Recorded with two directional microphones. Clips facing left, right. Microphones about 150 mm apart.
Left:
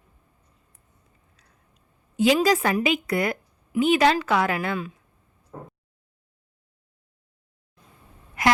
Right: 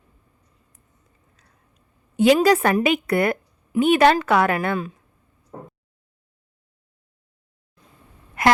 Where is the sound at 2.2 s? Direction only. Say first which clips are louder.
Right 4 dB; 60° right (ahead or behind).